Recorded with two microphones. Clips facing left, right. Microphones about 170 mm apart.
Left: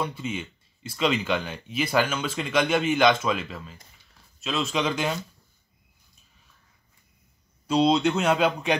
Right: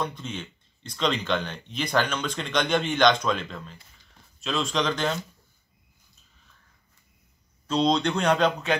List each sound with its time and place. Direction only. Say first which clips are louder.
0.0 s speech: left 2 dB; 5° left (ahead or behind)
7.6 s speech: left 2 dB; 10° left (ahead or behind)